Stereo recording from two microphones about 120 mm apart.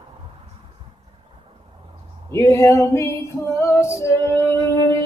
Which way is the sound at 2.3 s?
25° left (ahead or behind).